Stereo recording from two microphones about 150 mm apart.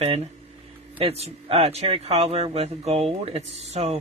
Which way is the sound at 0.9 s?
40° right (ahead or behind).